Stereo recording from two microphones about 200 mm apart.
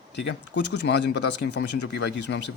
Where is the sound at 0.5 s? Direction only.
60° left (ahead or behind).